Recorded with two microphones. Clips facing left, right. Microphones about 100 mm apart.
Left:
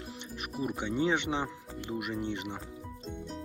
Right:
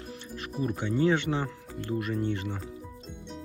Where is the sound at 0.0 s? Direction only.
20° left (ahead or behind).